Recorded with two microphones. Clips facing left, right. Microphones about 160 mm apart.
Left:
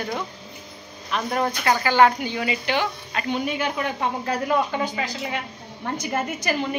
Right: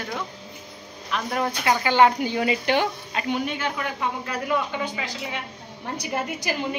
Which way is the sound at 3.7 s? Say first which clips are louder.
Left 3 dB; 40° left (ahead or behind).